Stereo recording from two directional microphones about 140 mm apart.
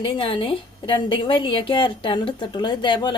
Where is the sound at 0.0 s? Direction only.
40° left (ahead or behind).